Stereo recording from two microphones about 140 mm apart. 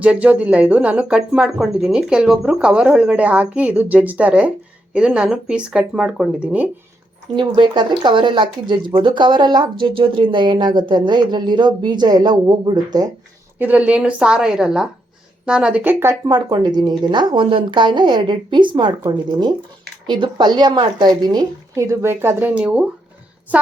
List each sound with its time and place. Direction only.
0.0 s speech: 10° right (ahead or behind)
7.3 s speech: 35° right (ahead or behind)
13.6 s speech: 10° right (ahead or behind)
16.2 s a woman's voice: 30° right (ahead or behind)
20.1 s a woman's voice: 35° right (ahead or behind); by 22.9 s 10° right (ahead or behind)